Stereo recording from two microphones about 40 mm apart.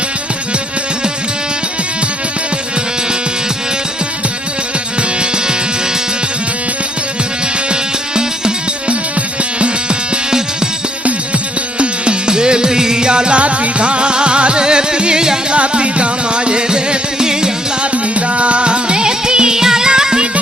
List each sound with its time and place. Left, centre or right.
7.7 s music: right
11.8 s music: right
15.5 s music: right
17.9 s music: right